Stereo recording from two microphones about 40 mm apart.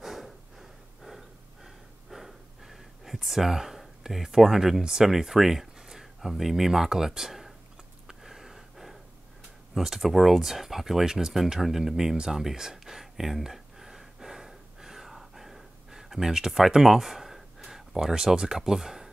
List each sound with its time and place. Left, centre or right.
0.0 s snort: centre
4.8 s speech: centre
8.1 s a sound: centre
9.8 s speech: centre
12.2 s a sound: centre
18.1 s speech: centre